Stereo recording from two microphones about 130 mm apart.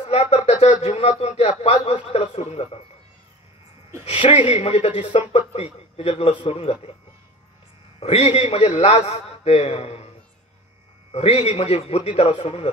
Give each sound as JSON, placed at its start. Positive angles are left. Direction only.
{"t": 0.0, "sound": "a man's voice", "side_deg": 55}
{"t": 4.0, "sound": "a man's voice", "side_deg": 55}
{"t": 8.0, "sound": "a man's voice", "side_deg": 55}
{"t": 11.1, "sound": "a man's voice", "side_deg": 50}